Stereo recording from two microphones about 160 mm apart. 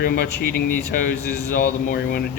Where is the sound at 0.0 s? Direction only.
80° left.